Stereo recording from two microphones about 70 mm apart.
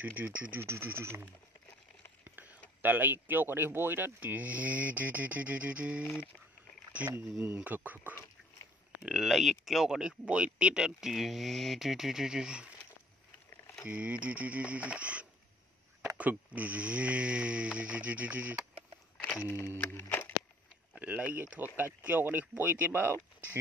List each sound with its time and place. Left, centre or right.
0.0 s speech: right
2.3 s a sound: right
2.8 s speech: right
6.0 s speech: left
7.4 s speech: right
9.0 s speech: centre
13.5 s a sound: left
13.8 s speech: centre
19.4 s speech: left
19.8 s music: left
20.9 s speech: right